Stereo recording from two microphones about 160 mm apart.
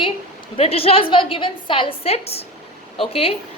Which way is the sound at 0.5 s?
40° left (ahead or behind).